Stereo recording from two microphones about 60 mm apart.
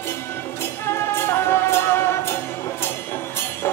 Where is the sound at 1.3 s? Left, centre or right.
Left.